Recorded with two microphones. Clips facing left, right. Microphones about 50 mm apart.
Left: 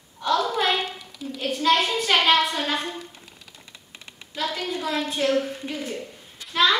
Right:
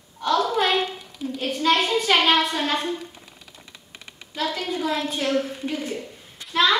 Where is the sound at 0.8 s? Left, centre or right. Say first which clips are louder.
Right 3 dB; right.